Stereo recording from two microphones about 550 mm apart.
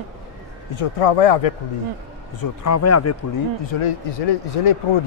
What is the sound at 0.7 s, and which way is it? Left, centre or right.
Speech, left.